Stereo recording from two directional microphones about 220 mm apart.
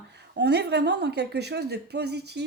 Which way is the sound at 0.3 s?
50° right (ahead or behind).